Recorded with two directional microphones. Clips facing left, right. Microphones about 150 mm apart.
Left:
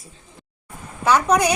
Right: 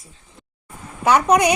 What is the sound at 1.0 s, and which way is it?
Speech, 20° right (ahead or behind).